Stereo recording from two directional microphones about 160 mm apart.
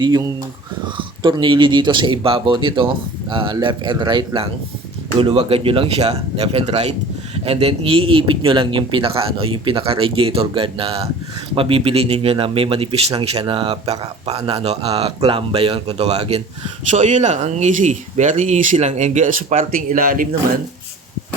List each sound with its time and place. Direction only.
0.0 s speech: 25° right (ahead or behind)
5.2 s speech: 35° right (ahead or behind); by 20.2 s 60° right (ahead or behind)